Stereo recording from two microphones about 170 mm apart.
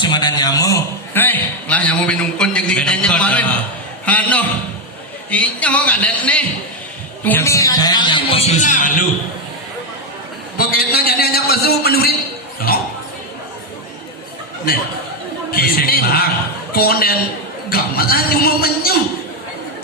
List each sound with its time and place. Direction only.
0.0 s a man's voice: 25° left (ahead or behind); by 9.0 s 50° left (ahead or behind)
10.6 s a man's voice: 65° left (ahead or behind)
12.7 s a sound: 60° left (ahead or behind)
15.5 s speech: 60° left (ahead or behind)